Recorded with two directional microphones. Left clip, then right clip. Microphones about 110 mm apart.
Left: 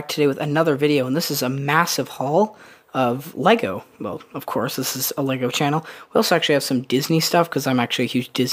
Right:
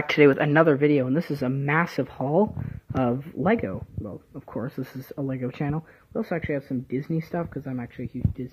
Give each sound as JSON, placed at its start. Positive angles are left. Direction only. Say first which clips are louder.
{"t": 0.0, "sound": "speech", "louder": "right 2 dB", "side_deg": 25}
{"t": 3.5, "sound": "speech", "louder": "left 6 dB", "side_deg": 35}
{"t": 5.1, "sound": "speech", "louder": "left 8 dB", "side_deg": 30}